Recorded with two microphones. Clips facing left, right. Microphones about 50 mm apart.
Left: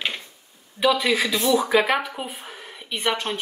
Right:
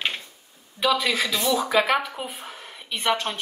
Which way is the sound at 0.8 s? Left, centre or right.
Centre.